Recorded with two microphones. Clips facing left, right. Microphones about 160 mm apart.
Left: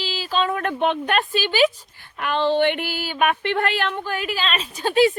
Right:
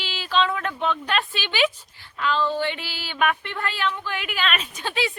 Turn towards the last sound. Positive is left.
turn(degrees=45)  # may be behind; listen again after turning